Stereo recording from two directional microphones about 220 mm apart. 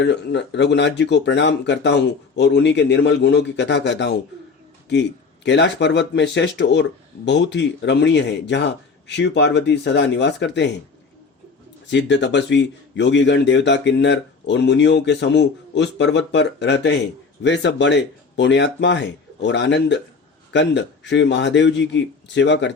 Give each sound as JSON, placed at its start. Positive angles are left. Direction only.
{"t": 0.0, "sound": "speech", "side_deg": 50}
{"t": 11.9, "sound": "speech", "side_deg": 55}